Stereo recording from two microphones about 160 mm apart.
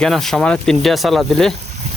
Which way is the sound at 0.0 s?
Centre (ahead or behind).